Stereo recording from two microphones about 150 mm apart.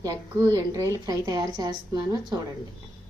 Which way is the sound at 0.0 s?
25° right (ahead or behind).